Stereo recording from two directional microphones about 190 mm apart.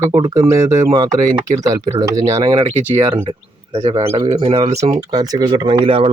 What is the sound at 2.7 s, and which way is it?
Speech, 30° right (ahead or behind).